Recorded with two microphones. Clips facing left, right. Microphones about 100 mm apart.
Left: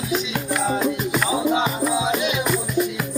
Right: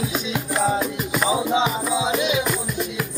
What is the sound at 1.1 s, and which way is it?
Music, 20° right (ahead or behind).